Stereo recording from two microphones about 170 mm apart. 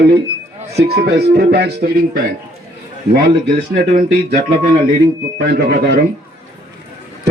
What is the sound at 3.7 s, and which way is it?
Speech, 55° right (ahead or behind).